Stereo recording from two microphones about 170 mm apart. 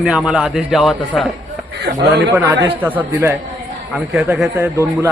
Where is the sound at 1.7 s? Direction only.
75° right (ahead or behind).